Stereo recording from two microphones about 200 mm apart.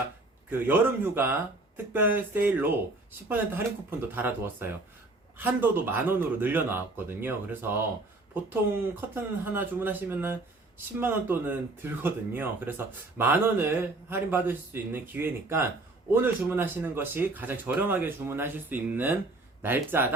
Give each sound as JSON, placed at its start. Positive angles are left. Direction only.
{"t": 0.6, "sound": "speech", "side_deg": -10}
{"t": 9.0, "sound": "speech", "side_deg": -10}